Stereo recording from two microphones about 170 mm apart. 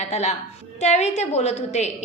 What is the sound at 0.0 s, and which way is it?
A woman's voice, 40° left (ahead or behind).